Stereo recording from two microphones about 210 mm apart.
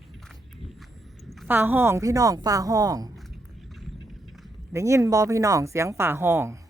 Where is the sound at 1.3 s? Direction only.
5° right (ahead or behind).